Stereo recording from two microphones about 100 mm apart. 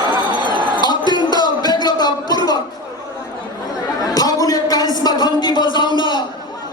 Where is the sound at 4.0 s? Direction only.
40° left (ahead or behind).